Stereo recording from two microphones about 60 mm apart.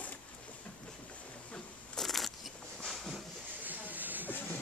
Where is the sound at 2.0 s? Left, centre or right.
Centre.